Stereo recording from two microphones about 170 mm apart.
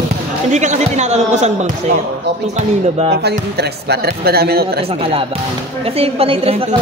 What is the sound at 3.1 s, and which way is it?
Speech, 70° right (ahead or behind).